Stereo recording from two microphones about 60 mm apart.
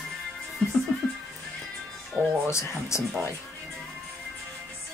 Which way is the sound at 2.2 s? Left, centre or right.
Right.